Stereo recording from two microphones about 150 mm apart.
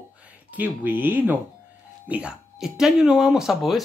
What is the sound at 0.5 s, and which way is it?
Speech, 10° right (ahead or behind).